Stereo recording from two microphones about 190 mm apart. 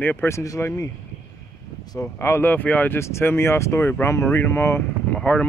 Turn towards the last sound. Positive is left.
turn(degrees=5)  # may be behind; listen again after turning